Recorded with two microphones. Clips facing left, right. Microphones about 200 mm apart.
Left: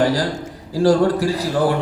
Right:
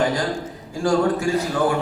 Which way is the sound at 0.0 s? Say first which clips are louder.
Left 3 dB; 35° left (ahead or behind).